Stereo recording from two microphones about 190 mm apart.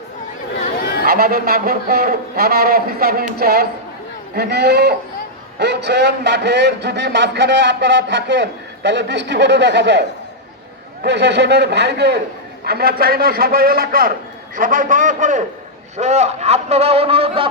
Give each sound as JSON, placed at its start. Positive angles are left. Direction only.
{"t": 0.8, "sound": "chatter", "side_deg": 60}
{"t": 1.0, "sound": "a man's voice", "side_deg": -55}